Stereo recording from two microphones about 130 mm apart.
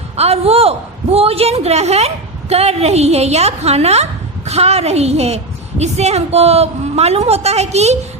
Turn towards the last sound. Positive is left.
turn(degrees=-55)  # may be behind; listen again after turning